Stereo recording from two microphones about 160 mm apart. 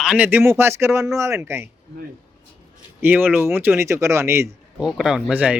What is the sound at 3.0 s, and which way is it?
Speech, 10° right (ahead or behind).